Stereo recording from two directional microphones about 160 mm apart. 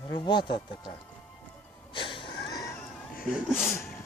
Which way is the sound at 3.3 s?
5° right (ahead or behind).